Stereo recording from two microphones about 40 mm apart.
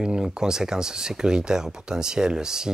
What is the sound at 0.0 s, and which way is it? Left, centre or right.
Speech, centre.